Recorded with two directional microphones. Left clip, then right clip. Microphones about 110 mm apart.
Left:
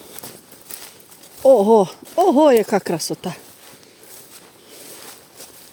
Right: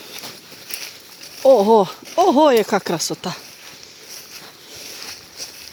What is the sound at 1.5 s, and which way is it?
Speech, 30° left (ahead or behind).